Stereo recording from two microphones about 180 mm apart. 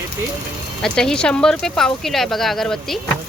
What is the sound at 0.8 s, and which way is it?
Speech, 5° left (ahead or behind).